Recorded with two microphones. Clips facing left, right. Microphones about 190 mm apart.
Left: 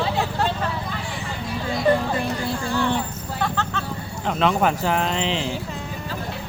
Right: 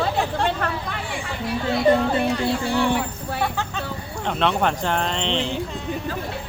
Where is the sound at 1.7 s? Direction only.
65° right (ahead or behind).